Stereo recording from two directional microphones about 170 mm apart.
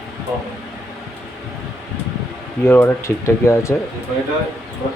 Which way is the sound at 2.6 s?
15° left (ahead or behind).